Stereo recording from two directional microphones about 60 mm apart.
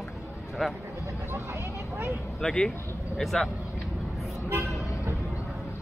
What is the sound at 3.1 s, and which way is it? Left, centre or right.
Speech, centre.